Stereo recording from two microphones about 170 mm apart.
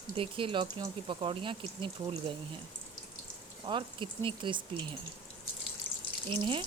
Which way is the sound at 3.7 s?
30° right (ahead or behind).